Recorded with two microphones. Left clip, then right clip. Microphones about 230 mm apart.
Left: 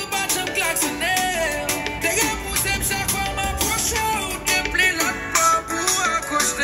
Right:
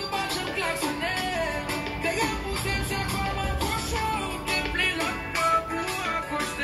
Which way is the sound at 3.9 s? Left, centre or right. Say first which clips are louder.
Left 5 dB; left.